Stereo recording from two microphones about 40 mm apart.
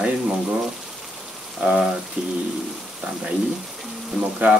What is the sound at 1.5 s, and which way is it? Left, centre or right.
Speech, centre.